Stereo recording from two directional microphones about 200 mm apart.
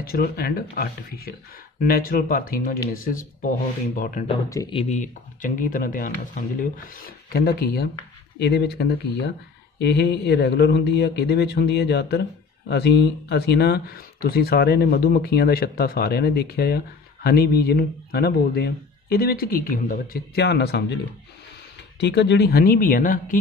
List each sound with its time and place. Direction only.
0.0 s speech: 50° left (ahead or behind)
4.5 s speech: 15° left (ahead or behind)
4.7 s speech: 35° left (ahead or behind)
7.3 s speech: 50° left (ahead or behind)
22.0 s speech: 60° left (ahead or behind); by 23.4 s 40° left (ahead or behind)